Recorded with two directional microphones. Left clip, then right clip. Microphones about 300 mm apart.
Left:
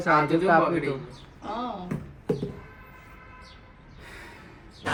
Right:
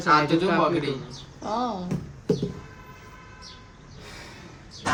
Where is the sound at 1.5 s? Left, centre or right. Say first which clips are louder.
Right 5 dB; centre.